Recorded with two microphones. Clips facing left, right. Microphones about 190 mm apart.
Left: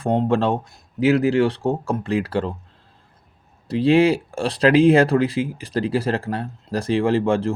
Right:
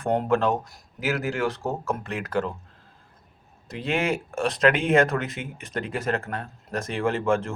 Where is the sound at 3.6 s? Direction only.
35° left (ahead or behind).